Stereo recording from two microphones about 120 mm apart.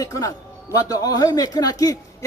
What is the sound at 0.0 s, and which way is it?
Speech, 30° left (ahead or behind).